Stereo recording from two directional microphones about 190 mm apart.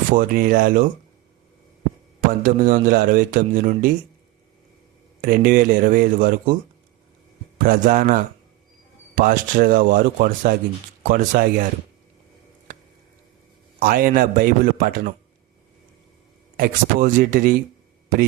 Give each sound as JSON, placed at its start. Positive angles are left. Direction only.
{"t": 0.1, "sound": "speech", "side_deg": -45}
{"t": 2.4, "sound": "speech", "side_deg": -45}
{"t": 5.2, "sound": "speech", "side_deg": -50}
{"t": 7.6, "sound": "speech", "side_deg": -45}
{"t": 13.7, "sound": "speech", "side_deg": -50}
{"t": 16.6, "sound": "speech", "side_deg": -45}